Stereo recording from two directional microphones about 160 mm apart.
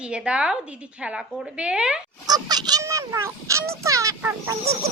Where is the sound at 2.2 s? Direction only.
25° right (ahead or behind).